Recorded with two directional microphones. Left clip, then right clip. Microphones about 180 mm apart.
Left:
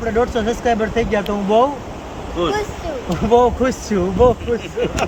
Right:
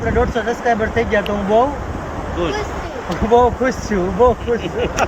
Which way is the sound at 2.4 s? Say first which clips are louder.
Left 2 dB; 20° left (ahead or behind).